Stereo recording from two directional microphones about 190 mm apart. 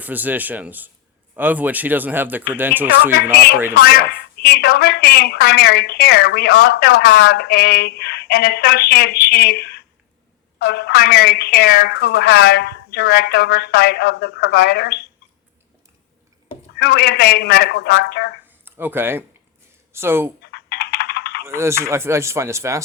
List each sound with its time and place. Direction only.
0.0 s speech: 10° right (ahead or behind)
3.8 s a woman's voice: 55° left (ahead or behind)
16.7 s a woman's voice: 60° left (ahead or behind)
18.6 s speech: 10° right (ahead or behind)
20.4 s typing: 60° left (ahead or behind)
21.4 s speech: 15° right (ahead or behind)